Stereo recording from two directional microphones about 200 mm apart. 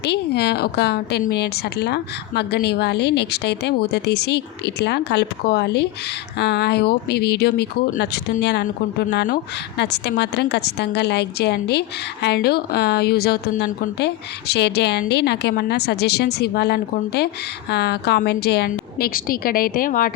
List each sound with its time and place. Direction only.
0.0 s a woman's voice: 55° left (ahead or behind)